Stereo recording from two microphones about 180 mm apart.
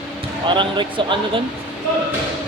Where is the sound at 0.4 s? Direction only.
25° right (ahead or behind).